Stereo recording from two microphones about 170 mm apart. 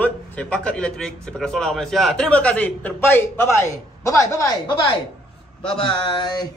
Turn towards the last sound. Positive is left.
turn(degrees=25)  # may be behind; listen again after turning